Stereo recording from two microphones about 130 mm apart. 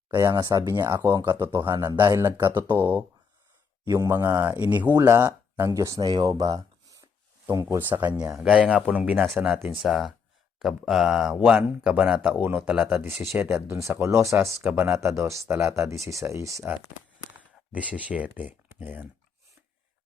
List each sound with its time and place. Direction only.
0.1 s speech: 25° right (ahead or behind)
1.2 s speech: 15° right (ahead or behind); by 2.6 s 35° right (ahead or behind)
2.6 s speech: 15° right (ahead or behind)
9.7 s speech: 5° right (ahead or behind); by 16.6 s 25° right (ahead or behind)
17.7 s speech: 10° right (ahead or behind)